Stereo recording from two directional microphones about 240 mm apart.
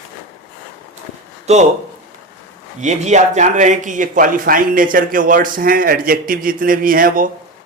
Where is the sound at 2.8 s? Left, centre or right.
Right.